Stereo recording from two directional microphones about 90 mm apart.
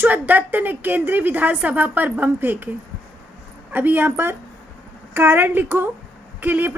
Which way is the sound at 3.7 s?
20° right (ahead or behind).